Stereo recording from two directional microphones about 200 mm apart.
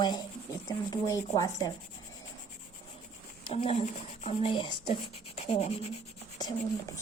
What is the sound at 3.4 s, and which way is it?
Speech, 30° left (ahead or behind).